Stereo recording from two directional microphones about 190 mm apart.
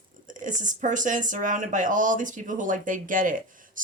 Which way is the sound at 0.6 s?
40° right (ahead or behind).